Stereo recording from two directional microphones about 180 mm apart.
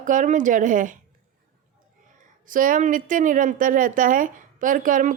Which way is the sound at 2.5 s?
50° right (ahead or behind).